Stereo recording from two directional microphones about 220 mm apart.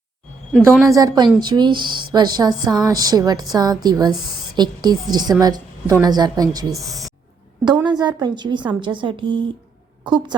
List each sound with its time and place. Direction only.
0.9 s a woman's voice: 15° right (ahead or behind)
6.7 s speech: centre (ahead or behind)
7.6 s a woman's voice: 20° right (ahead or behind)